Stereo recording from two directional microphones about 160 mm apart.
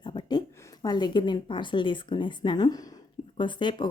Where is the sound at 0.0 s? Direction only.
30° left (ahead or behind).